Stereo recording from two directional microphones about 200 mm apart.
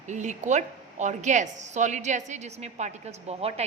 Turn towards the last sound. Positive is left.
turn(degrees=-30)  # may be behind; listen again after turning